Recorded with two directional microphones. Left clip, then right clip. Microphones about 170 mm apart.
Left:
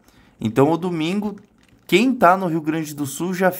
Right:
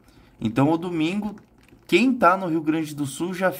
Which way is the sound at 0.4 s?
25° left (ahead or behind).